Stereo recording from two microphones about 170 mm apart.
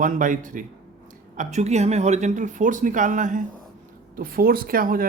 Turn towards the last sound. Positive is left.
turn(degrees=-55)  # may be behind; listen again after turning